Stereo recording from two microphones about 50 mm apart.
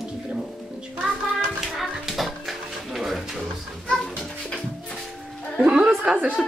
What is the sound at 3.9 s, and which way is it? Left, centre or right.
Dog, centre.